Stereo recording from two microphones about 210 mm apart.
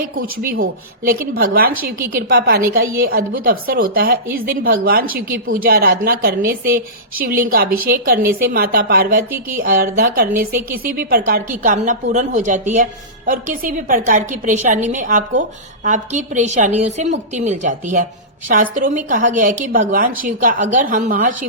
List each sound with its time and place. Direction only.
0.2 s a woman's voice: 45° right (ahead or behind)